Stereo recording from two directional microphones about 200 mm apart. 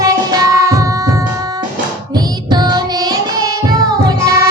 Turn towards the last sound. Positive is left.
turn(degrees=-15)  # may be behind; listen again after turning